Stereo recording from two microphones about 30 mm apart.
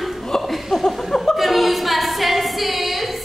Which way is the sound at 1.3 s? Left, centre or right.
Centre.